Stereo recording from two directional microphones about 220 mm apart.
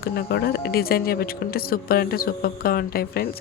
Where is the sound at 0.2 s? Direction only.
45° left (ahead or behind).